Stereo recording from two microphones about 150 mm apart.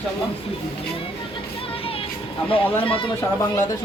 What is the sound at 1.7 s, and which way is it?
Music, 40° left (ahead or behind).